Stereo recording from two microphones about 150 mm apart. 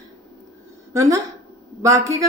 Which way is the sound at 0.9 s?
20° right (ahead or behind).